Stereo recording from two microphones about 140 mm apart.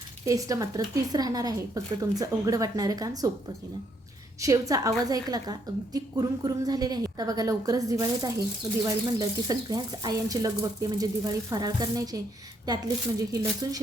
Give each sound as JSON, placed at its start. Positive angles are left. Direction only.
{"t": 0.3, "sound": "a woman's voice", "side_deg": -25}
{"t": 4.4, "sound": "a woman's voice", "side_deg": -25}